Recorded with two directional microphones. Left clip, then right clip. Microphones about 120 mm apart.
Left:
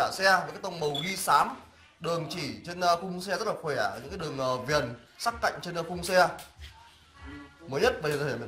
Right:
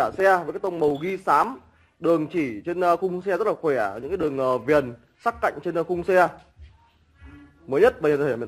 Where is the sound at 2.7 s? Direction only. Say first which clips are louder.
Right 4 dB; 25° right (ahead or behind).